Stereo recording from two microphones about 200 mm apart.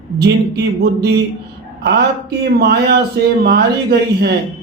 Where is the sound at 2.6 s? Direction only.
55° right (ahead or behind).